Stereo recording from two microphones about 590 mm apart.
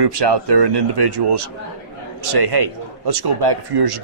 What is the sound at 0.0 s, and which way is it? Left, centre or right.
A man's voice, right.